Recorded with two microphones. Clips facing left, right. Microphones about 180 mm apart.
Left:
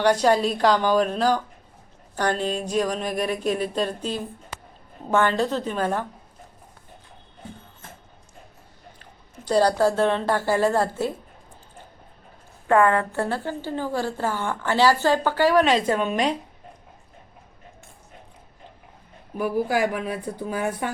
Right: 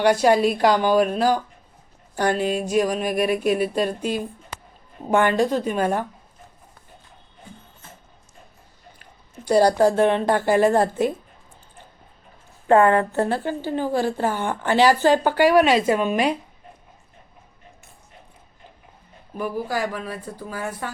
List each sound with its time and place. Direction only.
0.0 s a woman's voice: 10° right (ahead or behind)
9.0 s speech: 10° right (ahead or behind)
12.6 s a woman's voice: 25° right (ahead or behind); by 16.3 s 5° right (ahead or behind)
19.4 s speech: 10° left (ahead or behind)